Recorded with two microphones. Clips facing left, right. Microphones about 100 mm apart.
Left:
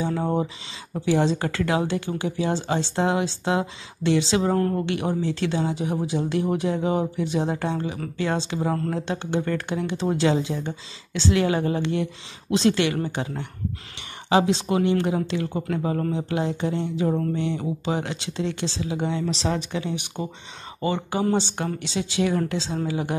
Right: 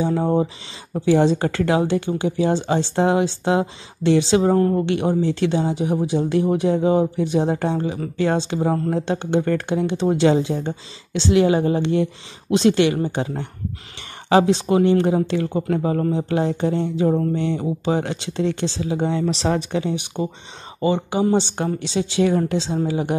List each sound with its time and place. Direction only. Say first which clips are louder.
0.0 s speech: right 5 dB; 25° right (ahead or behind)
1.7 s speech: right 5 dB; 25° right (ahead or behind)
8.9 s speech: right 5 dB; 30° right (ahead or behind)
9.4 s speech: right 5 dB; 40° right (ahead or behind)
9.7 s speech: right 5 dB; 25° right (ahead or behind)
14.7 s speech: right 5 dB; 30° right (ahead or behind)
20.2 s speech: right 6 dB; 25° right (ahead or behind)